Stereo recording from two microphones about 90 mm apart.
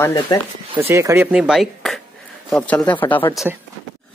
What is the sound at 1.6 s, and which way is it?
Speech, centre (ahead or behind).